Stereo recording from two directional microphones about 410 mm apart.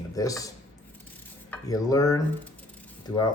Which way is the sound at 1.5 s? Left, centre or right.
Centre.